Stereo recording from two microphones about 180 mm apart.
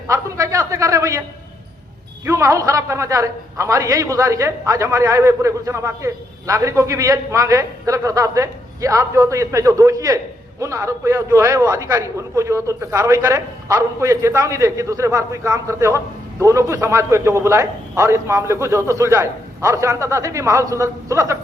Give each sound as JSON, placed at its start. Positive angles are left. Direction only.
{"t": 0.1, "sound": "a man's voice", "side_deg": -15}
{"t": 2.2, "sound": "a man's voice", "side_deg": -15}